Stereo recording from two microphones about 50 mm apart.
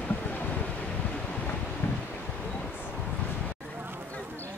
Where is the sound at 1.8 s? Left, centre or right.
Left.